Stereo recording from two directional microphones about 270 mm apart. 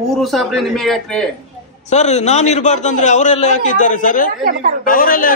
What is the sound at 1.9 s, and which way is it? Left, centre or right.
A man's voice, left.